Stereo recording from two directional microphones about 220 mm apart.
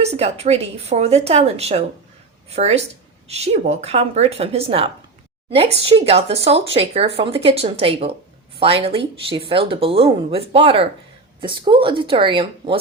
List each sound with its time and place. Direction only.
0.0 s speech: 30° right (ahead or behind)